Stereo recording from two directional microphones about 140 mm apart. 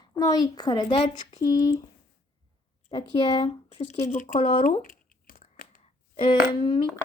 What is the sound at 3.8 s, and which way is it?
Speech, 55° left (ahead or behind).